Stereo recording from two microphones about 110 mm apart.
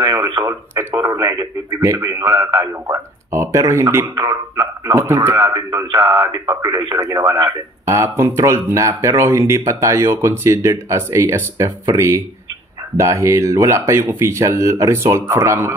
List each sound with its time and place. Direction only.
0.5 s speech: 30° right (ahead or behind)
4.9 s speech: 25° right (ahead or behind)
5.3 s speech: 40° right (ahead or behind)